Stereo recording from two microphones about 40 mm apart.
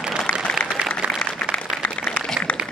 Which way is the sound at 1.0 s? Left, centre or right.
Right.